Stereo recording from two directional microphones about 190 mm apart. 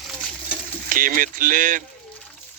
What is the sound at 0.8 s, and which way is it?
Speech, 45° right (ahead or behind).